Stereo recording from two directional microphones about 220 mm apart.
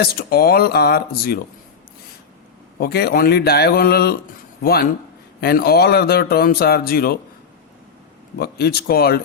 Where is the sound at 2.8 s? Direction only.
45° left (ahead or behind).